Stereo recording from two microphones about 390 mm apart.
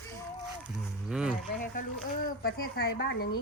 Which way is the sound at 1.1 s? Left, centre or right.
Centre.